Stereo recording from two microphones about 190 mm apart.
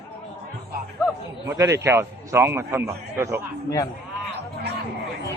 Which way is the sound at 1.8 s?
15° right (ahead or behind).